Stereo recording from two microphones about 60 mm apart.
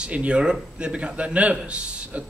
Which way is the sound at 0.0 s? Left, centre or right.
Centre.